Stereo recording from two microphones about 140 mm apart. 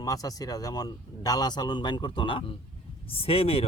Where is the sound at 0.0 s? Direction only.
25° left (ahead or behind).